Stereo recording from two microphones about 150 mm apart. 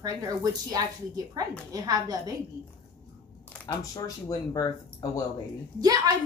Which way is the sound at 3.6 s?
25° left (ahead or behind).